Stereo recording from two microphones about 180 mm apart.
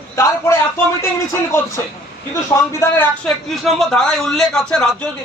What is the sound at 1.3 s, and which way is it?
A man's voice, 15° left (ahead or behind).